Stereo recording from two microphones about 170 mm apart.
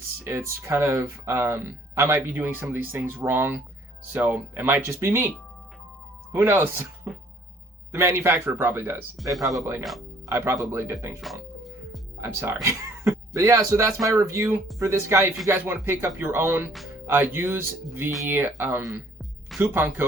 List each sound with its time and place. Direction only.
0.3 s speech: 15° right (ahead or behind)
6.3 s speech: 15° right (ahead or behind)
12.2 s speech: 15° right (ahead or behind)